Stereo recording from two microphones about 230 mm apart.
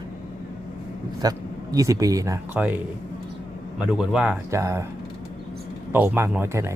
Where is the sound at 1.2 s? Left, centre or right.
Centre.